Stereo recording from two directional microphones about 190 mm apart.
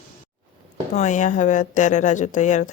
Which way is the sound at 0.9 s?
40° left (ahead or behind).